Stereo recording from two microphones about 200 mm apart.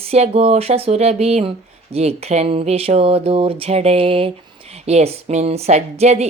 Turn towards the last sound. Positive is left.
turn(degrees=-35)  # may be behind; listen again after turning